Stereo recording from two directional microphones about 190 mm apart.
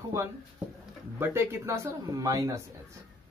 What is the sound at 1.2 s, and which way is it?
Speech, 15° right (ahead or behind).